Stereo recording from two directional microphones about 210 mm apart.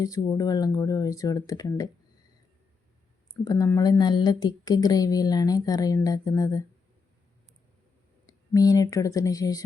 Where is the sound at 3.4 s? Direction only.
15° left (ahead or behind).